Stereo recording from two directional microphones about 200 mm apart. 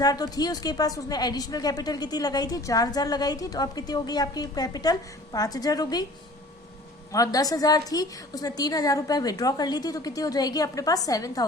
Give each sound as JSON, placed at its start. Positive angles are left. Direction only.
{"t": 0.0, "sound": "a woman's voice", "side_deg": 20}
{"t": 7.1, "sound": "a woman's voice", "side_deg": 15}